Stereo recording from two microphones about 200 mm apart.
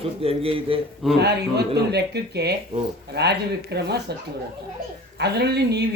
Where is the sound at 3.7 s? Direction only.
55° right (ahead or behind).